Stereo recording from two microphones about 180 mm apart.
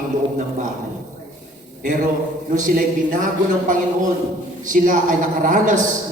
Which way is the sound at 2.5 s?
50° right (ahead or behind).